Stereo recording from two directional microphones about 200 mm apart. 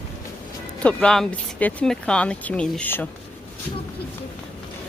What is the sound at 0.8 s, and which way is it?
A woman's voice, 5° left (ahead or behind).